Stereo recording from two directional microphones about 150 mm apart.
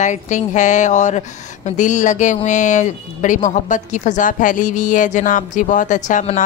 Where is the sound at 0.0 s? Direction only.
55° left (ahead or behind).